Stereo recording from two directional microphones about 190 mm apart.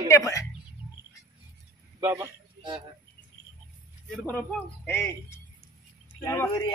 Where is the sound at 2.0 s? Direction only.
15° right (ahead or behind).